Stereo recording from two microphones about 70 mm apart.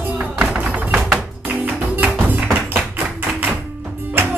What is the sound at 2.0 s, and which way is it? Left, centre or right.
Music, right.